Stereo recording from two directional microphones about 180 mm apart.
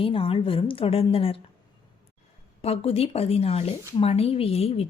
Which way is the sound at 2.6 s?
30° left (ahead or behind).